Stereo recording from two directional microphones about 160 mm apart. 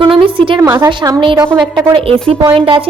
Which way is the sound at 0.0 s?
35° right (ahead or behind).